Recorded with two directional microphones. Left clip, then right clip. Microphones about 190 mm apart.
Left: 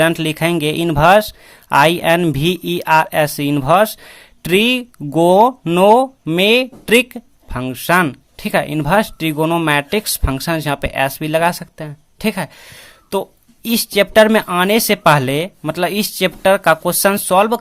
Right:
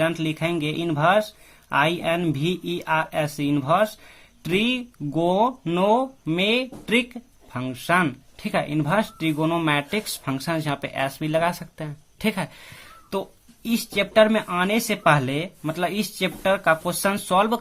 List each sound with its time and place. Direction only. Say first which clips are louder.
0.0 s speech: left 9 dB; 40° left (ahead or behind)